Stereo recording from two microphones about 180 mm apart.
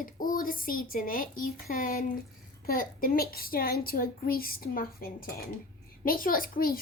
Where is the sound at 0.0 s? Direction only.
50° left (ahead or behind).